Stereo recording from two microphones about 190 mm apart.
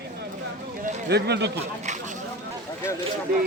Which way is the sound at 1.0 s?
60° right (ahead or behind).